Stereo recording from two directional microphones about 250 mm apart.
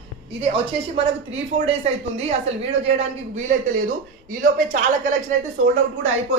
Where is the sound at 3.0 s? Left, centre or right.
Right.